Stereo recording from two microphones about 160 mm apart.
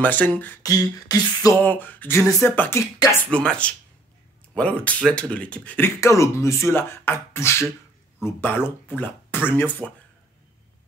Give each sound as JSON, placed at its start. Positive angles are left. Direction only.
{"t": 0.0, "sound": "speech", "side_deg": 10}
{"t": 0.6, "sound": "beatboxing", "side_deg": 20}
{"t": 1.6, "sound": "speech", "side_deg": 10}